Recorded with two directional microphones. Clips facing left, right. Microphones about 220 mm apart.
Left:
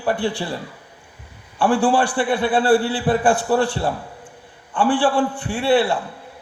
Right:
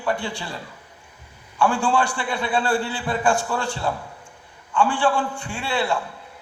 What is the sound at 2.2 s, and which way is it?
A man's voice, 60° left (ahead or behind).